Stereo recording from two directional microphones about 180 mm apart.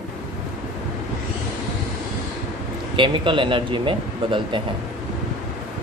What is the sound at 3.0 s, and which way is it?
Speech, 30° right (ahead or behind).